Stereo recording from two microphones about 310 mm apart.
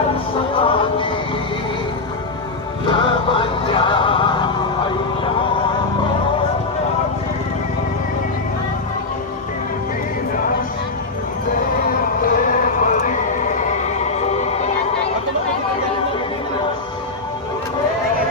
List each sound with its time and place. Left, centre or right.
0.5 s music: centre
2.8 s music: centre
12.2 s music: left